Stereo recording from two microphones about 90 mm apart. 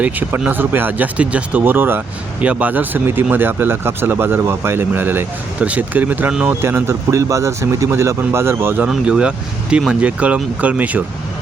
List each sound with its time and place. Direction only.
0.0 s speech: 20° right (ahead or behind)
6.5 s speech: 30° right (ahead or behind)
8.9 s speech: 10° right (ahead or behind)